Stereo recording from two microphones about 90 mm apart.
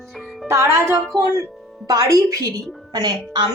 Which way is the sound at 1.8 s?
40° right (ahead or behind).